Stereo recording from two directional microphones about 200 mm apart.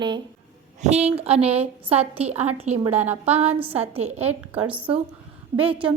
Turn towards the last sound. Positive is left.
turn(degrees=-5)  # may be behind; listen again after turning